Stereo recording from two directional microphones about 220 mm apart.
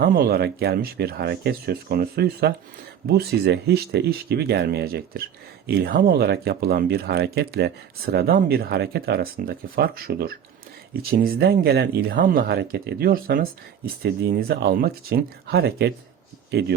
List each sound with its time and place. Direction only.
0.0 s speech: 45° right (ahead or behind)